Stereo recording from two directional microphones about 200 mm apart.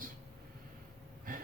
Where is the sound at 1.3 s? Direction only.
45° right (ahead or behind).